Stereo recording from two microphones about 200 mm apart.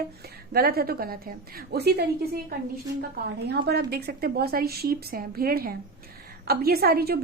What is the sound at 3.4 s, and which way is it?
A woman's voice, 55° right (ahead or behind).